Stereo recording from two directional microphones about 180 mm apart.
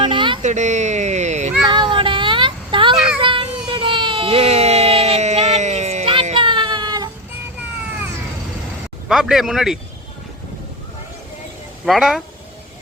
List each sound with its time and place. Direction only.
0.0 s a sound: 25° right (ahead or behind)
0.4 s speech: 40° right (ahead or behind)
1.6 s a sound: 25° right (ahead or behind)
2.9 s child singing: 5° right (ahead or behind)
3.7 s baby cry: 30° right (ahead or behind)
9.0 s speech: centre (ahead or behind)
11.9 s speech: centre (ahead or behind)